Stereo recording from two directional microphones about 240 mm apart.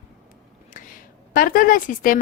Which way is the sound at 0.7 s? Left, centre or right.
Left.